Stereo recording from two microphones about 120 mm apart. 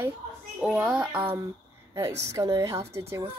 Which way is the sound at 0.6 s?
10° right (ahead or behind).